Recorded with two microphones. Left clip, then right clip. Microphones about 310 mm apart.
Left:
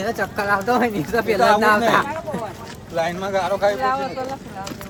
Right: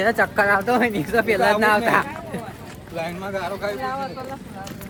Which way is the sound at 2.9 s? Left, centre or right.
Centre.